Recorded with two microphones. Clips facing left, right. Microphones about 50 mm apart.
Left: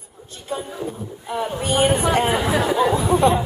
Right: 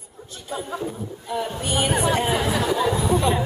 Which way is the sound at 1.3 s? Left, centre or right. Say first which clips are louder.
Left 3 dB; left.